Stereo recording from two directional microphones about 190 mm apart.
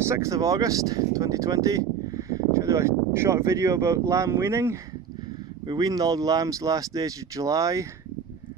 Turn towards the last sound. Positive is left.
turn(degrees=-15)  # may be behind; listen again after turning